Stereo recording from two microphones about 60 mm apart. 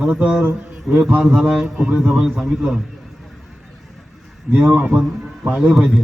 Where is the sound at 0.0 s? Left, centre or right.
Centre.